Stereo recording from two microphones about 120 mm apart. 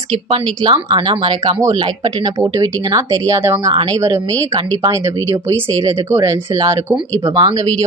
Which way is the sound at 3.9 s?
30° right (ahead or behind).